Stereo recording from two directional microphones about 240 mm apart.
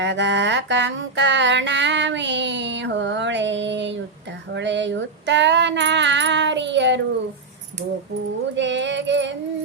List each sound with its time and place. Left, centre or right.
0.0 s mantra: right
8.5 s mantra: right